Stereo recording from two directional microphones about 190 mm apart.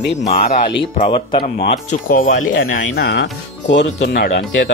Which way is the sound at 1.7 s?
45° left (ahead or behind).